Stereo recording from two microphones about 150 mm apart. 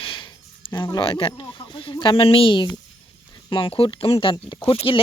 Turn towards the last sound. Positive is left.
turn(degrees=35)  # may be behind; listen again after turning